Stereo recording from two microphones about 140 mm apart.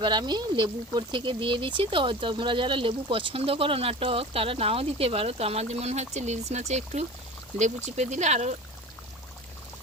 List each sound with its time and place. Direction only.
0.0 s speech: 30° right (ahead or behind); by 8.5 s 55° right (ahead or behind)